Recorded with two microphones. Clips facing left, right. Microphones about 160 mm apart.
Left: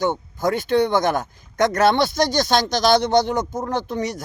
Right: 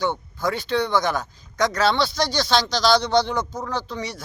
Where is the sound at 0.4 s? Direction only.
50° left (ahead or behind).